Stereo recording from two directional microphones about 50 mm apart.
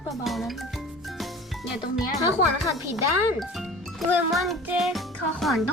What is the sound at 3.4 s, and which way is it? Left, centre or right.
A child's voice, centre.